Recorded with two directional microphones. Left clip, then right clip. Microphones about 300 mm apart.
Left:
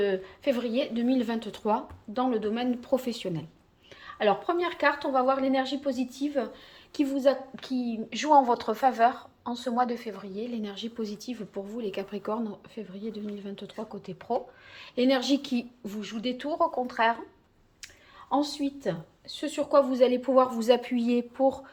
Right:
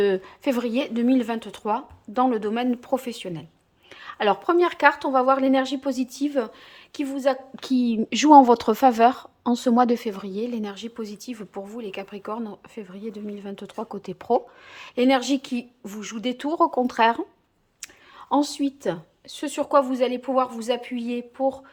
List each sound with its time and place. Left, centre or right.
0.0 s speech: centre
6.9 s speech: centre
7.6 s speech: right
18.3 s a woman's voice: centre